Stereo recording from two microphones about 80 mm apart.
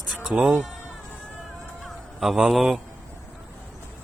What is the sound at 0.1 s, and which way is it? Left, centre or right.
Chicken, centre.